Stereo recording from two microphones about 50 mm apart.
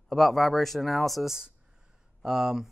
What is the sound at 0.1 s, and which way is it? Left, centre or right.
Speech, centre.